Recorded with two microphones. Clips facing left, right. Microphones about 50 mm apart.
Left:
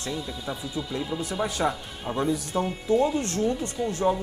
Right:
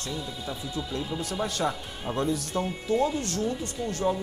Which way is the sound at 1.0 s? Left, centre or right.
Centre.